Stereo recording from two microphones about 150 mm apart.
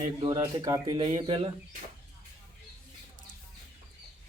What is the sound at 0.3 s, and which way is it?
Speech, 20° right (ahead or behind).